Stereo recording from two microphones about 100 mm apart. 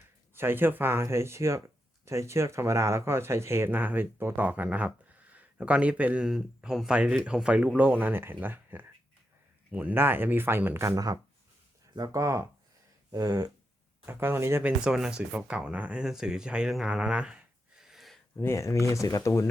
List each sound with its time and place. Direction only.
0.3 s speech: 20° right (ahead or behind)
13.1 s a sound: 35° right (ahead or behind)
14.0 s speech: 20° right (ahead or behind)
14.6 s speech: 5° right (ahead or behind)
18.3 s speech: 25° left (ahead or behind)